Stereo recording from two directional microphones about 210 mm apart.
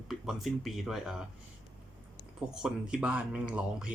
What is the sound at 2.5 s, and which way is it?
Speech, 5° right (ahead or behind).